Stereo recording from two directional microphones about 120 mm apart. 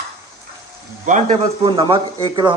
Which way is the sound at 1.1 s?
90° right.